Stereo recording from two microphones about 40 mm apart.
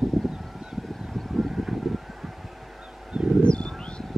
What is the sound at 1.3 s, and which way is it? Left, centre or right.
Vehicle, centre.